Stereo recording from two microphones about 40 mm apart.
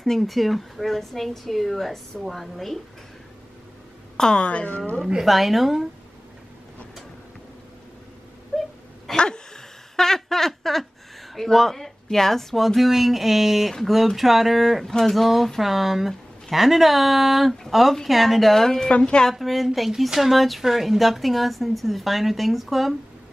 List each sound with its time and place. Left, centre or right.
0.0 s speech: centre
4.2 s a woman's voice: centre
4.5 s a woman's voice: left
5.2 s speech: centre
8.5 s whimper: centre
9.1 s dog: left
9.9 s a sound: centre
11.3 s speech: centre
18.9 s a woman's voice: left
19.3 s speech: centre